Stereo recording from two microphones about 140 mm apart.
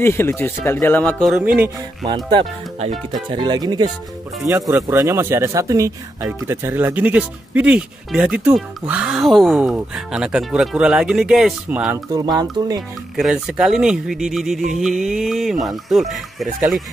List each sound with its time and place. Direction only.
0.0 s speech: 20° left (ahead or behind)
1.3 s speech: 10° right (ahead or behind)
2.0 s speech: 30° right (ahead or behind); by 11.9 s 5° right (ahead or behind)
12.1 s speech: 30° right (ahead or behind)
13.1 s speech: 5° right (ahead or behind)